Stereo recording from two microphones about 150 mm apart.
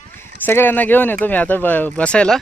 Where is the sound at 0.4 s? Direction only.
15° left (ahead or behind).